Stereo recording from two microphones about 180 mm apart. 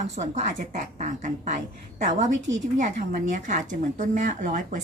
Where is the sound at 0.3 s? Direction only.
40° right (ahead or behind).